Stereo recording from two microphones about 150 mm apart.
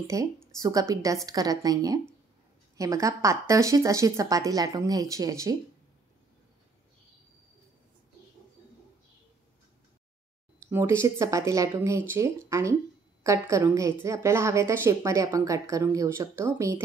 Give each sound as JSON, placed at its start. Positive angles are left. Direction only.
{"t": 0.0, "sound": "a woman's voice", "side_deg": -20}
{"t": 10.7, "sound": "a woman's voice", "side_deg": -15}